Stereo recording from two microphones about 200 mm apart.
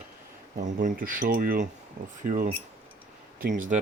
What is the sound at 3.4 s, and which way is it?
Speech, 40° right (ahead or behind).